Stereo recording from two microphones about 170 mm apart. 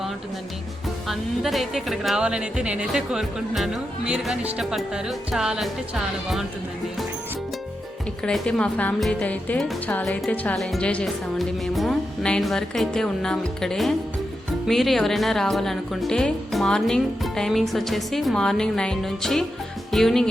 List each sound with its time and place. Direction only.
1.0 s speech: centre (ahead or behind)
8.2 s speech: 5° left (ahead or behind)